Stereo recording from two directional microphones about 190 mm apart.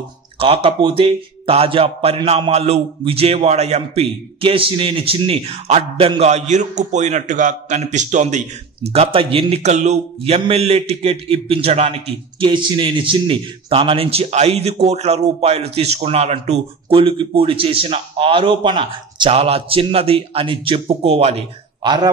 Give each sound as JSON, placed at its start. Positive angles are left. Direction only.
{"t": 0.4, "sound": "a man's voice", "side_deg": -30}
{"t": 21.8, "sound": "a man's voice", "side_deg": -20}